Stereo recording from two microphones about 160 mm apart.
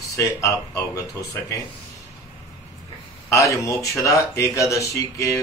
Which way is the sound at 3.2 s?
20° left (ahead or behind).